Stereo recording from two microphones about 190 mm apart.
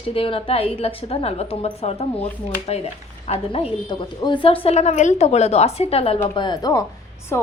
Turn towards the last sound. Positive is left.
turn(degrees=15)  # may be behind; listen again after turning